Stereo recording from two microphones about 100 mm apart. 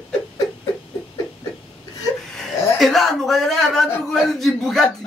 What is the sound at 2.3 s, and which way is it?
A man's voice, centre (ahead or behind).